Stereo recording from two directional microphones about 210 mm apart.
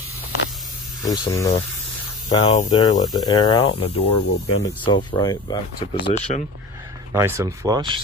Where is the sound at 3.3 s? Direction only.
20° left (ahead or behind).